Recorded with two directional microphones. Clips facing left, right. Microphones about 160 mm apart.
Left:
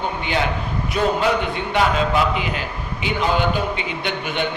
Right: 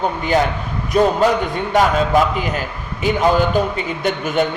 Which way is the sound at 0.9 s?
40° right (ahead or behind).